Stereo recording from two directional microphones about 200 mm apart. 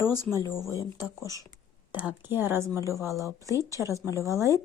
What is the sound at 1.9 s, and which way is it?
A woman's voice, 10° right (ahead or behind).